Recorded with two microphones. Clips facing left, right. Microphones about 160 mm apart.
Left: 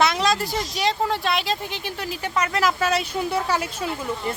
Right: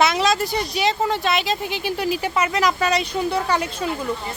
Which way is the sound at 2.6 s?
5° left (ahead or behind).